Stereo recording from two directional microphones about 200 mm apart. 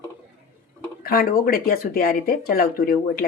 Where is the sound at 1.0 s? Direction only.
45° left (ahead or behind).